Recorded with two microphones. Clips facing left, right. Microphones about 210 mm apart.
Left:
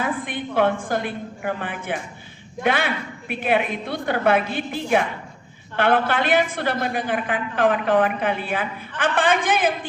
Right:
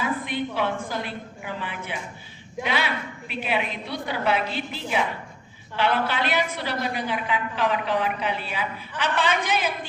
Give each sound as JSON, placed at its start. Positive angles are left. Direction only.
{"t": 0.0, "sound": "a woman's voice", "side_deg": 50}